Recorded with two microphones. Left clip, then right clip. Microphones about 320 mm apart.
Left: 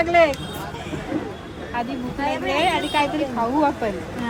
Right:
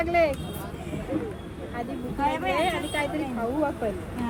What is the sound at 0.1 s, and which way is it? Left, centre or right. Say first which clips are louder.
Speech: left 6 dB; left.